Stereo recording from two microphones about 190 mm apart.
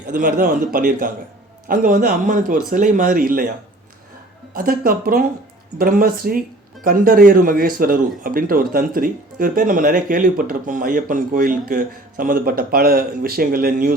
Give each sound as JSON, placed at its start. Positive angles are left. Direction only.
{"t": 0.1, "sound": "speech", "side_deg": -45}
{"t": 4.5, "sound": "speech", "side_deg": -50}